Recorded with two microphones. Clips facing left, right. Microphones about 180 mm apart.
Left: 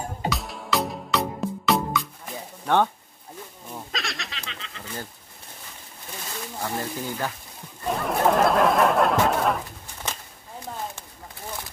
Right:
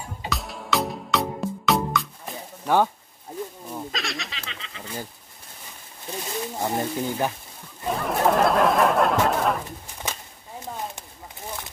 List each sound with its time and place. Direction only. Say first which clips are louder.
0.3 s music: right 3 dB; centre (ahead or behind)
2.6 s speech: right 1 dB; 5° right (ahead or behind)
6.2 s speech: right 4 dB; 20° right (ahead or behind)
7.8 s a sound: even; centre (ahead or behind)